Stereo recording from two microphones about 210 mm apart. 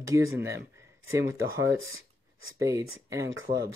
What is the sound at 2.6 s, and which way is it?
Speech, 15° right (ahead or behind).